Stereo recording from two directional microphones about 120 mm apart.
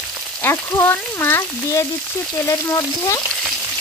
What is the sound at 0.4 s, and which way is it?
Frying, 15° left (ahead or behind).